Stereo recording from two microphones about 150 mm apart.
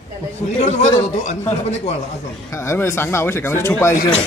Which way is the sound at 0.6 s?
50° left (ahead or behind).